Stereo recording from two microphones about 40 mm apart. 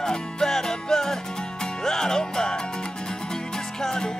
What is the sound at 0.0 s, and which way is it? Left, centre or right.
Music, centre.